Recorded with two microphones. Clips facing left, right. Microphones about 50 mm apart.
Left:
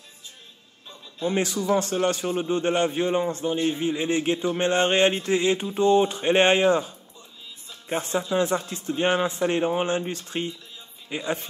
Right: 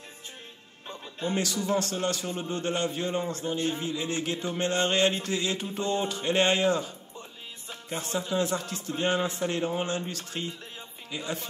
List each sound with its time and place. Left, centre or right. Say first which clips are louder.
1.2 s a man's voice: left 5 dB; left
7.9 s a man's voice: left 5 dB; left